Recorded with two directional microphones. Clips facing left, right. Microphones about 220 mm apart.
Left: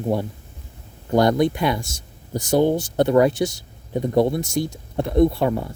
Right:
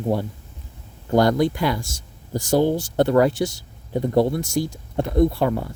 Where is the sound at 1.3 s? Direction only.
20° left (ahead or behind).